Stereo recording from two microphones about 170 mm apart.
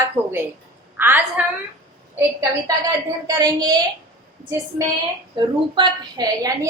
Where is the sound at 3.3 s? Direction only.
20° right (ahead or behind).